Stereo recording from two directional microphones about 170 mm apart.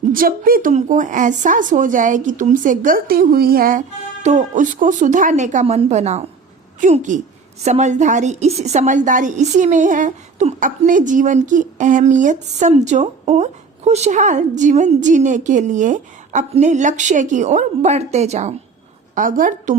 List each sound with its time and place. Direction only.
0.1 s a woman's voice: 60° right (ahead or behind)